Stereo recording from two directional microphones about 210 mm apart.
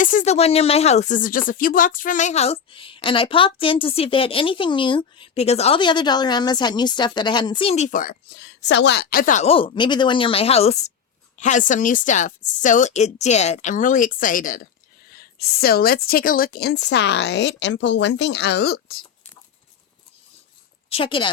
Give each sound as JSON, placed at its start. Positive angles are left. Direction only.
{"t": 0.0, "sound": "speech", "side_deg": 40}
{"t": 8.4, "sound": "a woman's voice", "side_deg": 55}
{"t": 20.9, "sound": "speech", "side_deg": 25}